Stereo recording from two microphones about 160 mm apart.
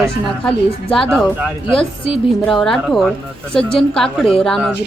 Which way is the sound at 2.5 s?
5° left (ahead or behind).